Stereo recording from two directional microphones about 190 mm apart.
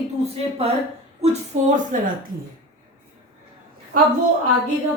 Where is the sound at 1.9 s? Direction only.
45° right (ahead or behind).